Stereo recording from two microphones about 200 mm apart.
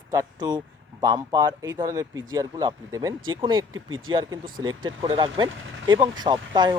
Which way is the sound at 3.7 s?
90° right.